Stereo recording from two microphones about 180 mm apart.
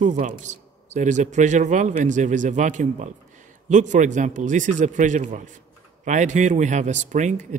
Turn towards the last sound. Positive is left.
turn(degrees=-40)  # may be behind; listen again after turning